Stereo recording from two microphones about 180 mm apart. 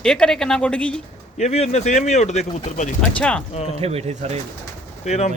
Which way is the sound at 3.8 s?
35° right (ahead or behind).